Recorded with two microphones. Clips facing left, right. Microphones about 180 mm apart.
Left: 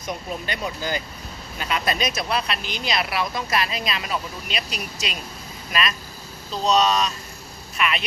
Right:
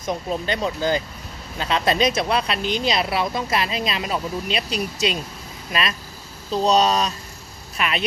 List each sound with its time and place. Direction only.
0.0 s speech: 25° right (ahead or behind)
6.5 s speech: 35° right (ahead or behind)